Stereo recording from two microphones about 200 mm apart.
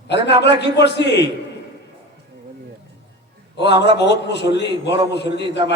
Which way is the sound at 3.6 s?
60° left (ahead or behind).